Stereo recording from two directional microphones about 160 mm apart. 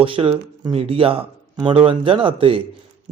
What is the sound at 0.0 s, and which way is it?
A man's voice, 35° right (ahead or behind).